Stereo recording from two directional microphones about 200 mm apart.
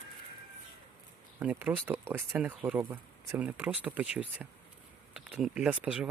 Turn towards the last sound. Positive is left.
turn(degrees=-5)  # may be behind; listen again after turning